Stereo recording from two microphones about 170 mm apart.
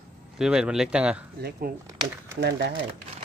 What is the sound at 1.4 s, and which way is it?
Speech, 65° right (ahead or behind).